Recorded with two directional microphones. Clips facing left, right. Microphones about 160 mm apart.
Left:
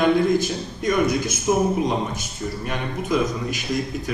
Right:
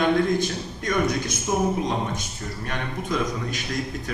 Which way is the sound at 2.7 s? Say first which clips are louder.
Left 3 dB; 5° left (ahead or behind).